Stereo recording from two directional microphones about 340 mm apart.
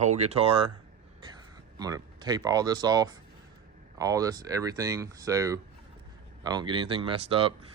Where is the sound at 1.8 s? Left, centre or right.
Centre.